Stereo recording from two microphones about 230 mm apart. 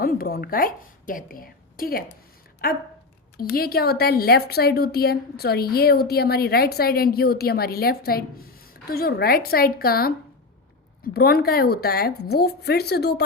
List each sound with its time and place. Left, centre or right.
0.0 s a woman's voice: left
3.3 s a woman's voice: left